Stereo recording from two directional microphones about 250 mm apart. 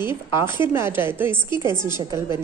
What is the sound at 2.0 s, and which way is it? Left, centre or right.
Speech, centre.